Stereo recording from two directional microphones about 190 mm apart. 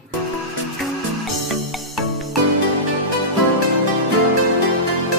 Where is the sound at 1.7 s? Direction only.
Centre (ahead or behind).